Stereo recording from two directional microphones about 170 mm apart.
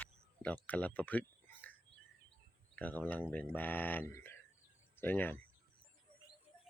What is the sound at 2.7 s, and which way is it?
Speech, 10° left (ahead or behind).